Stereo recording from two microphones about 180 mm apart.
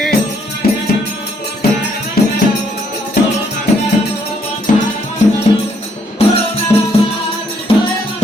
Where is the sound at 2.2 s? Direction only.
60° left (ahead or behind).